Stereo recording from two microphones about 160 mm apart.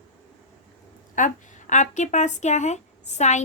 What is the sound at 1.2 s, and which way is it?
A woman's voice, 55° left (ahead or behind).